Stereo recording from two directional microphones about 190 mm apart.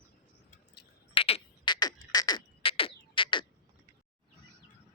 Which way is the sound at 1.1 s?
30° left (ahead or behind).